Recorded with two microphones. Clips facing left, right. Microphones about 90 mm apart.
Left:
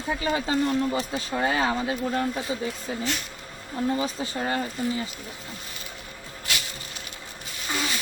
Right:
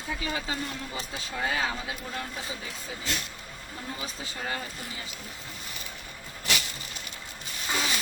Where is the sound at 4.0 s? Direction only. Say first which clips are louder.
Left 8 dB; 40° left (ahead or behind).